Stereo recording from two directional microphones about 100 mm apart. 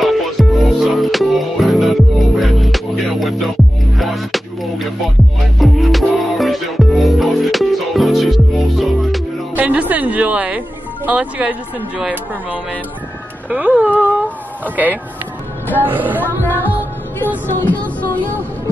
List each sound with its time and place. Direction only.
0.0 s music: centre (ahead or behind)
9.6 s music: 15° right (ahead or behind)
11.1 s speech: 15° right (ahead or behind)
13.5 s speech: 15° right (ahead or behind)
14.0 s a sound: 15° right (ahead or behind)
15.8 s speech: 20° right (ahead or behind)
16.3 s music: 20° left (ahead or behind)